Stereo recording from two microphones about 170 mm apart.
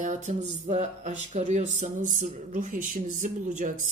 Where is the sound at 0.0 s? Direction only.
45° right (ahead or behind).